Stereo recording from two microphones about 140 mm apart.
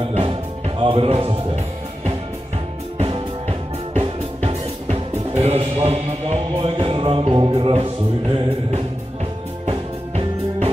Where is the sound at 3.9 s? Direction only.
50° right (ahead or behind).